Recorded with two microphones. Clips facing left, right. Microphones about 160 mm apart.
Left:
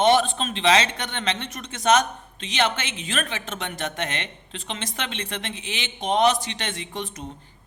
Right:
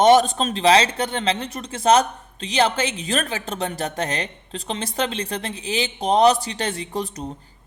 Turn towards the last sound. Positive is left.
turn(degrees=-35)  # may be behind; listen again after turning